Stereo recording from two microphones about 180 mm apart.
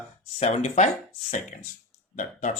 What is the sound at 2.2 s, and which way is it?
Speech, 45° left (ahead or behind).